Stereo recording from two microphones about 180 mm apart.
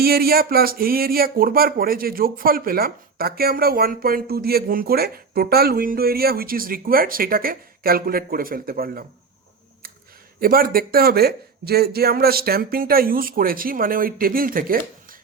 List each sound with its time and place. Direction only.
0.0 s speech: 60° right (ahead or behind)
10.4 s speech: 55° right (ahead or behind)